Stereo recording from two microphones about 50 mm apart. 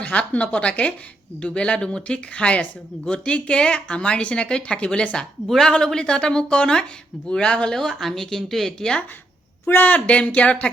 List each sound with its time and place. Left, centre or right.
0.0 s speech: left; by 9.0 s centre
9.6 s speech: left